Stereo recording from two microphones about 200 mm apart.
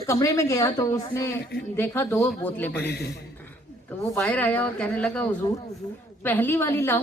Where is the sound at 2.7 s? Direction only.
55° left (ahead or behind).